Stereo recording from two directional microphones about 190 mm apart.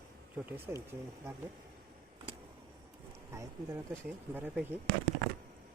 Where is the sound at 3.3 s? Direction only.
15° right (ahead or behind).